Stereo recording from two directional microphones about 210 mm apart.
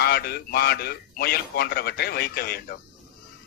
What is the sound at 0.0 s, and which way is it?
A man's voice, 50° left (ahead or behind).